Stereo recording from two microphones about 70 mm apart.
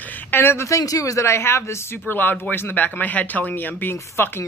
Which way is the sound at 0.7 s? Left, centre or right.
Left.